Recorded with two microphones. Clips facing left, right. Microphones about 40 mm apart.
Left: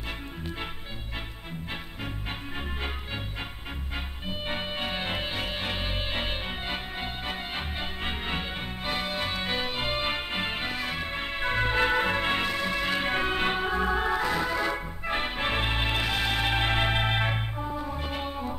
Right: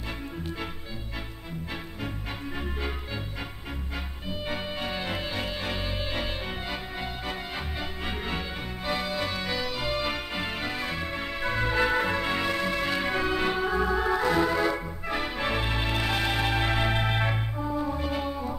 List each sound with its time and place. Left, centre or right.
4.3 s music: left
12.6 s music: centre
13.0 s music: left
14.2 s organ: centre
15.0 s music: left
17.6 s music: centre
17.9 s music: left